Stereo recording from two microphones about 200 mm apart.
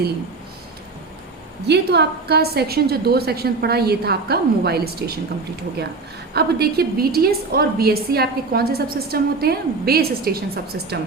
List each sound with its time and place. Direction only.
1.6 s a woman's voice: 55° right (ahead or behind)
6.3 s a woman's voice: 50° right (ahead or behind)